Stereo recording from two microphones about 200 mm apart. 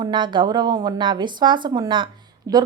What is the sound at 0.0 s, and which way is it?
A woman's voice, 25° right (ahead or behind).